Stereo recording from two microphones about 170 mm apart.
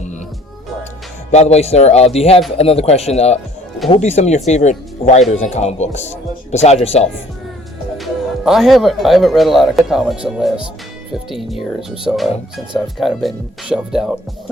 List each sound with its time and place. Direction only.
1.3 s speech: 40° left (ahead or behind)
7.9 s speech: centre (ahead or behind)